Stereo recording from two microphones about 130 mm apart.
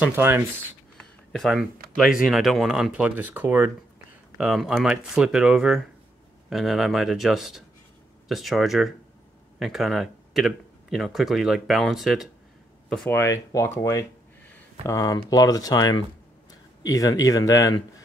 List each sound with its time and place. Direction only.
0.0 s speech: 15° right (ahead or behind)
0.9 s speech: 5° left (ahead or behind); by 3.7 s 15° right (ahead or behind)
4.4 s speech: centre (ahead or behind)
13.2 s speech: 25° left (ahead or behind)